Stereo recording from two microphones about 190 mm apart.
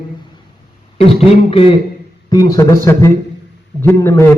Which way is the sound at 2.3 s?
20° left (ahead or behind).